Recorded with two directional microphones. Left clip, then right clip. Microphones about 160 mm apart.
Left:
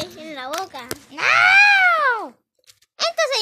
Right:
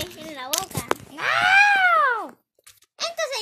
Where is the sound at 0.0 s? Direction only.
65° left (ahead or behind).